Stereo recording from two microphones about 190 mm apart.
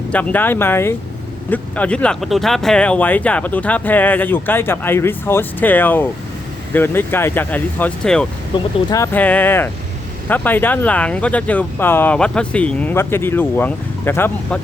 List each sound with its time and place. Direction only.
0.1 s speech: 5° left (ahead or behind)
8.5 s speech: 20° left (ahead or behind)
9.1 s speech: 10° left (ahead or behind)